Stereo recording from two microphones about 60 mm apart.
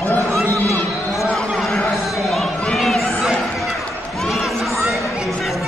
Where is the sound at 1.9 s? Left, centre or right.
Centre.